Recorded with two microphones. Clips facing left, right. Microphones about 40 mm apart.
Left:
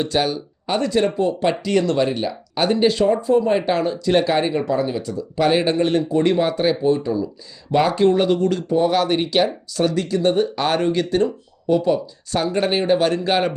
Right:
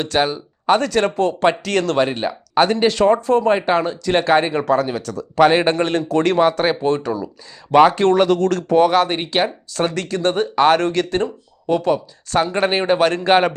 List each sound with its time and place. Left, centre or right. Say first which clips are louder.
0.1 s speech: right 3 dB; right
0.7 s speech: right 3 dB; right
2.0 s speech: even; right
2.6 s speech: left 1 dB; right
3.7 s speech: right 1 dB; right
4.5 s speech: right 3 dB; right
6.1 s speech: right 1 dB; right
6.4 s speech: right 2 dB; right
7.7 s speech: right 6 dB; right
8.0 s speech: right 2 dB; right
8.9 s speech: right 1 dB; right
9.9 s speech: left 1 dB; right
10.8 s speech: right 1 dB; right
11.1 s speech: left 2 dB; right